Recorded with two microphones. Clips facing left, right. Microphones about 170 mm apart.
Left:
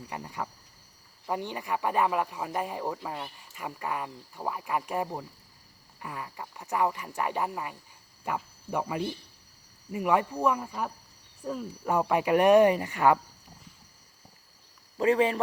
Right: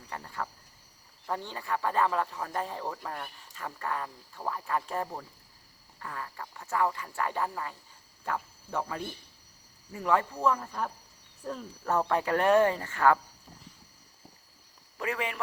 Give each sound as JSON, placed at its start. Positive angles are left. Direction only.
{"t": 0.1, "sound": "speech", "side_deg": 15}
{"t": 14.9, "sound": "speech", "side_deg": 30}